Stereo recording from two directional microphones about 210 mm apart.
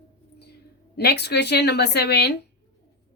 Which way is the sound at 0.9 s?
50° left (ahead or behind).